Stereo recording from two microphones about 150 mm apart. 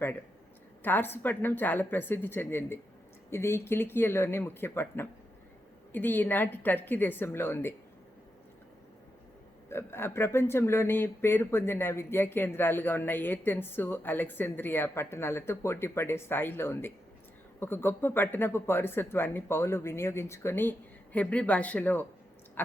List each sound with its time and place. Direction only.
0.8 s speech: 15° left (ahead or behind)
9.6 s speech: 15° left (ahead or behind)
22.6 s a sound: 15° left (ahead or behind)